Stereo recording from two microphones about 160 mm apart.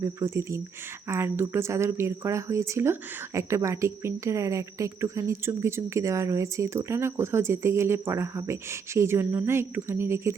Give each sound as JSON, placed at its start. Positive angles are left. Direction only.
{"t": 0.0, "sound": "speech", "side_deg": -20}